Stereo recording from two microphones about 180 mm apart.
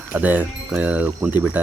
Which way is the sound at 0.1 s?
10° right (ahead or behind).